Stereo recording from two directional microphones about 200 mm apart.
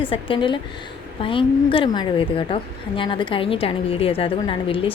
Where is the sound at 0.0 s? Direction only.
25° left (ahead or behind).